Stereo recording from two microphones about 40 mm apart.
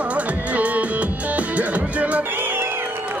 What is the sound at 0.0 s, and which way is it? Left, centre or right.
Music, right.